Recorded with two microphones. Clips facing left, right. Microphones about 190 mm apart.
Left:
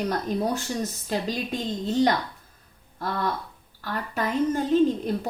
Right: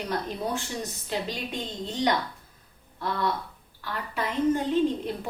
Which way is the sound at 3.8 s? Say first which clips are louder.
Left 3 dB; 45° left (ahead or behind).